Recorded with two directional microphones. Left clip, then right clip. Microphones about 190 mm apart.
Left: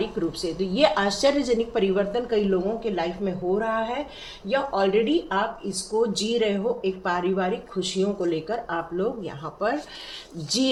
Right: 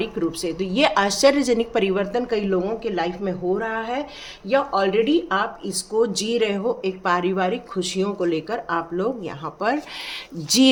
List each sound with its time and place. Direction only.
0.0 s a woman's voice: 30° right (ahead or behind)